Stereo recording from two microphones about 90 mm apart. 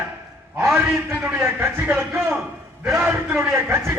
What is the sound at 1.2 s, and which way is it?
A man's voice, 25° right (ahead or behind).